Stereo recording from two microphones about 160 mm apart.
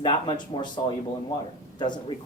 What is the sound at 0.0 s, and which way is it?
Speech, 30° left (ahead or behind).